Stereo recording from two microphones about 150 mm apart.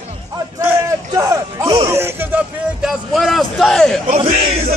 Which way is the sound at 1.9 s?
15° right (ahead or behind).